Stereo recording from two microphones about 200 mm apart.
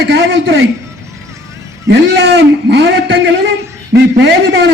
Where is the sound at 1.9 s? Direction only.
55° right (ahead or behind).